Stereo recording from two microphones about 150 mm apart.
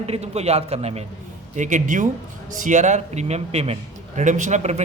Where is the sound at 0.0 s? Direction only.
45° right (ahead or behind).